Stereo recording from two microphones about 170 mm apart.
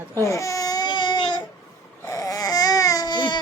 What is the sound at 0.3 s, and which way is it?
Baby cry, 20° left (ahead or behind).